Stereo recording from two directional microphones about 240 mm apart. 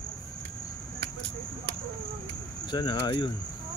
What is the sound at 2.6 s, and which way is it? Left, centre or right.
Speech, centre.